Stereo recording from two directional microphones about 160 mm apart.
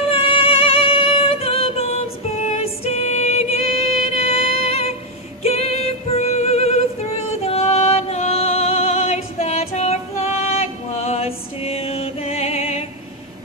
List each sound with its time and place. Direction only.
0.0 s music: 35° left (ahead or behind)
5.4 s female singing: 40° left (ahead or behind)
7.4 s music: 40° left (ahead or behind)